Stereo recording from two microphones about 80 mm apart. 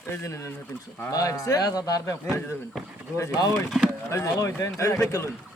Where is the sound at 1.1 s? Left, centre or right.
Left.